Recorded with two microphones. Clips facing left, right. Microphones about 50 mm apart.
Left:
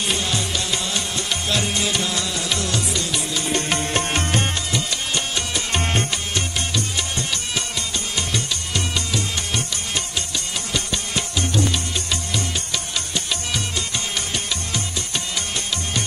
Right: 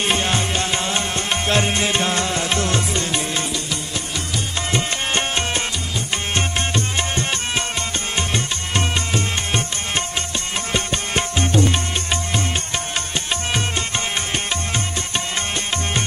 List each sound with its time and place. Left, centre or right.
0.0 s music: right
3.5 s music: left
4.7 s music: right